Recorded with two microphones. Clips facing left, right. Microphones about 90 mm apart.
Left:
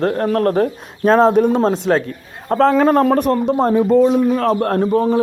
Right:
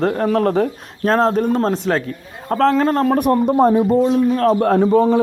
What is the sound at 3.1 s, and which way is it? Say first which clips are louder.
Speech: right 1 dB; 15° right (ahead or behind).